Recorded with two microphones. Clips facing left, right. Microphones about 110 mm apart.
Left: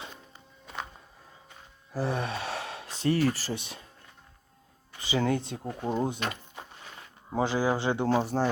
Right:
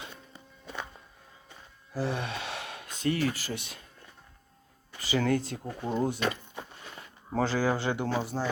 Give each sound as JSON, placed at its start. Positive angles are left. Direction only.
{"t": 1.9, "sound": "speech", "side_deg": 30}
{"t": 3.5, "sound": "speech", "side_deg": 25}
{"t": 4.9, "sound": "speech", "side_deg": 20}
{"t": 7.3, "sound": "speech", "side_deg": 15}
{"t": 8.0, "sound": "speech", "side_deg": 40}